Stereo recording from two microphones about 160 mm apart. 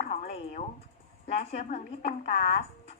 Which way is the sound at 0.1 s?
40° left (ahead or behind).